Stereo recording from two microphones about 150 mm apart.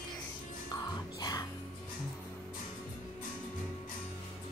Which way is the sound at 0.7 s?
25° left (ahead or behind).